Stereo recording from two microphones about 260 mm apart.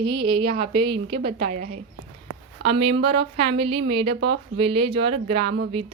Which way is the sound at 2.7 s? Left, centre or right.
Right.